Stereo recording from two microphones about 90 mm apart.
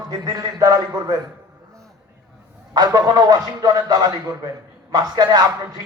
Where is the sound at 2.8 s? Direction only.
45° right (ahead or behind).